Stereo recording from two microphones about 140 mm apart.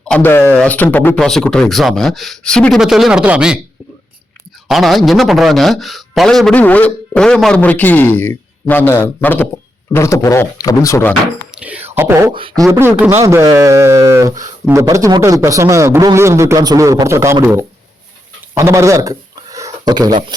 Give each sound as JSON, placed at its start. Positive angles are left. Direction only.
{"t": 0.1, "sound": "speech", "side_deg": 15}
{"t": 4.7, "sound": "a man's voice", "side_deg": 0}
{"t": 11.5, "sound": "speech", "side_deg": -10}
{"t": 11.9, "sound": "beatboxing", "side_deg": -20}
{"t": 12.3, "sound": "a sound", "side_deg": -35}
{"t": 12.8, "sound": "beatboxing", "side_deg": -15}
{"t": 13.2, "sound": "a man's voice", "side_deg": -25}
{"t": 17.4, "sound": "beatboxing", "side_deg": -15}
{"t": 18.5, "sound": "a sound", "side_deg": -20}